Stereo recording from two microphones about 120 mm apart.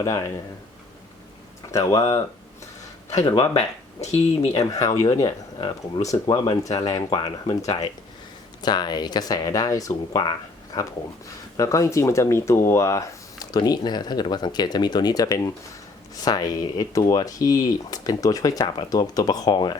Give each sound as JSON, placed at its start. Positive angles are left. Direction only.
{"t": 0.0, "sound": "speech", "side_deg": 30}
{"t": 1.7, "sound": "speech", "side_deg": 25}
{"t": 3.3, "sound": "speech", "side_deg": 55}
{"t": 4.8, "sound": "speech", "side_deg": 30}
{"t": 8.6, "sound": "speech", "side_deg": 35}